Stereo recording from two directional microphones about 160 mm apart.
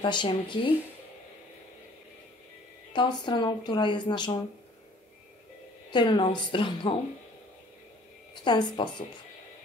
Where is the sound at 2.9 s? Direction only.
30° left (ahead or behind).